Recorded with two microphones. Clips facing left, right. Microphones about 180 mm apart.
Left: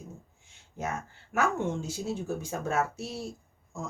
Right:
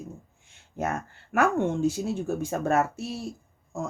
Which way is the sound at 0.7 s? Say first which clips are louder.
Right 5 dB; 60° right (ahead or behind).